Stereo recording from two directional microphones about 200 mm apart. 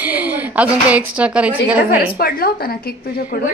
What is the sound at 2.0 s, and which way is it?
Speech, 50° left (ahead or behind).